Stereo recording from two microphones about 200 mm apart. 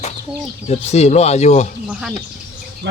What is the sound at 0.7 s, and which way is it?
Speech, 35° left (ahead or behind).